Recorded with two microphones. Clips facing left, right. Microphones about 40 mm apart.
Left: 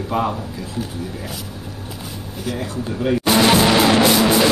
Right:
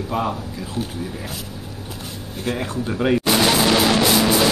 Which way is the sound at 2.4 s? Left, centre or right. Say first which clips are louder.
Right 1 dB; right.